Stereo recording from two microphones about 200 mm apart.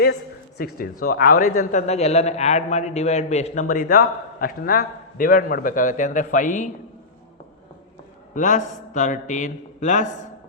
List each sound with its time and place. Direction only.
0.0 s speech: 55° left (ahead or behind)
8.4 s speech: 40° left (ahead or behind)